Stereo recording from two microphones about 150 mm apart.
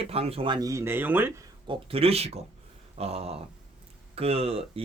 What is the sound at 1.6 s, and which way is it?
Speech, 35° right (ahead or behind).